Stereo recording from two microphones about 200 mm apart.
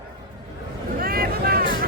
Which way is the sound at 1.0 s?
50° right (ahead or behind).